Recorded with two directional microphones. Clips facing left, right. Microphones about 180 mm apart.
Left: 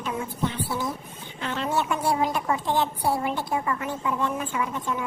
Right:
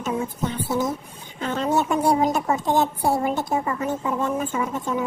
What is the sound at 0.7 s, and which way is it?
Speech, 20° right (ahead or behind).